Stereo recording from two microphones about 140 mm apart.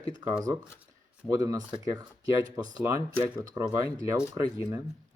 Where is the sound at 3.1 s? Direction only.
15° right (ahead or behind).